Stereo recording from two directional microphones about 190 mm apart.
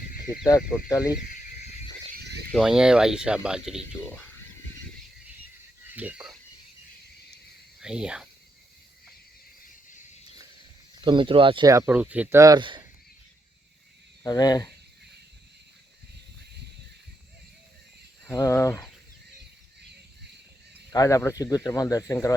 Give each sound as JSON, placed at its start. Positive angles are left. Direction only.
{"t": 0.3, "sound": "speech", "side_deg": 20}
{"t": 1.3, "sound": "a sound", "side_deg": 35}
{"t": 2.1, "sound": "a sound", "side_deg": -60}
{"t": 2.5, "sound": "speech", "side_deg": 0}
{"t": 5.8, "sound": "a sound", "side_deg": -10}
{"t": 7.8, "sound": "speech", "side_deg": -5}
{"t": 11.0, "sound": "speech", "side_deg": -25}
{"t": 14.3, "sound": "speech", "side_deg": 20}
{"t": 18.3, "sound": "speech", "side_deg": 15}
{"t": 20.9, "sound": "speech", "side_deg": 15}